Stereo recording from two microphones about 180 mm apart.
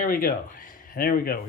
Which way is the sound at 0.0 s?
55° left (ahead or behind).